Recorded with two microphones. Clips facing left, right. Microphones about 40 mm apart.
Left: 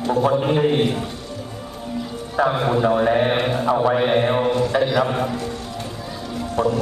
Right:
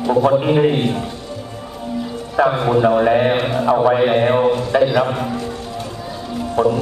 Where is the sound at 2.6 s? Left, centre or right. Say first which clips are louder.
Right 4 dB; right.